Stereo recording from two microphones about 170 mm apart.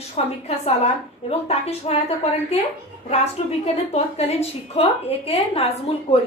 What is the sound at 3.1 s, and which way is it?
Speech, 40° left (ahead or behind).